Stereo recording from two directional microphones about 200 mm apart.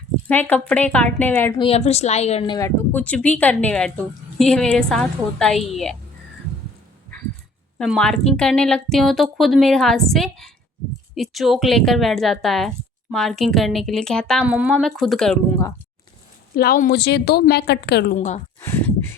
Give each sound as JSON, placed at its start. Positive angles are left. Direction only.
{"t": 0.3, "sound": "speech", "side_deg": 10}
{"t": 1.5, "sound": "a woman's voice", "side_deg": 30}
{"t": 2.6, "sound": "speech", "side_deg": 10}
{"t": 7.8, "sound": "speech", "side_deg": 5}
{"t": 16.6, "sound": "a woman's voice", "side_deg": 45}
{"t": 18.2, "sound": "a woman's voice", "side_deg": 35}